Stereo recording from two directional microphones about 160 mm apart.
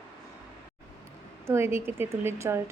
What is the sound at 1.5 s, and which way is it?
A woman's voice, 15° right (ahead or behind).